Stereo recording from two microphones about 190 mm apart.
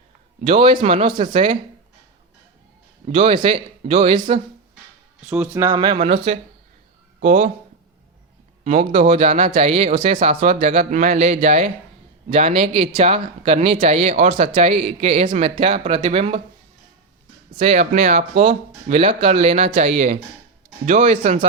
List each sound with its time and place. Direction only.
0.4 s speech: 25° right (ahead or behind)
3.1 s speech: 30° right (ahead or behind)
5.3 s speech: 5° right (ahead or behind); by 7.5 s 40° right (ahead or behind)
8.6 s speech: 35° right (ahead or behind)
17.5 s speech: 35° right (ahead or behind)